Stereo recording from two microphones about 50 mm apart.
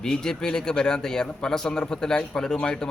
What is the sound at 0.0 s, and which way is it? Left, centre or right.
A man's voice, centre.